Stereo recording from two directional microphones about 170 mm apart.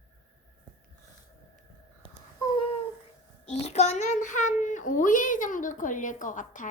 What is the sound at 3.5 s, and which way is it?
A child's voice, 40° left (ahead or behind).